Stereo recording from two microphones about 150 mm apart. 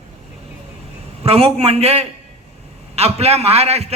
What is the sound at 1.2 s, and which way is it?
A man's voice, 40° right (ahead or behind).